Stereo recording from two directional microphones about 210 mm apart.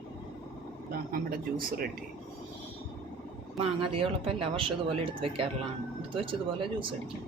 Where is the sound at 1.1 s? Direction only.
45° right (ahead or behind).